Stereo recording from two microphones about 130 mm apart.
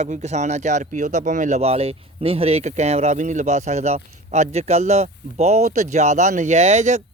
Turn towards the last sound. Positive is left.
turn(degrees=-60)  # may be behind; listen again after turning